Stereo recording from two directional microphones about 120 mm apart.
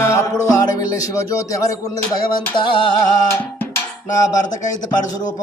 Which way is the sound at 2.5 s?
40° left (ahead or behind).